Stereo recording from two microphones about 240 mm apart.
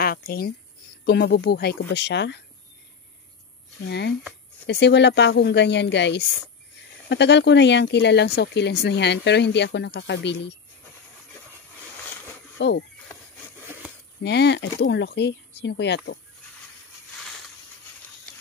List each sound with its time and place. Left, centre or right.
0.0 s a sound: left
1.0 s speech: left
3.8 s speech: left
12.5 s speech: left
14.2 s speech: left